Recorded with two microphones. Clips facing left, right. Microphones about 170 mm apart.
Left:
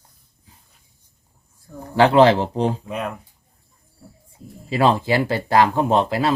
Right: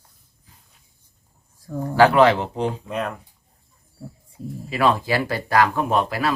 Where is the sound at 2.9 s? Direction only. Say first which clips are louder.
Even; 5° left (ahead or behind).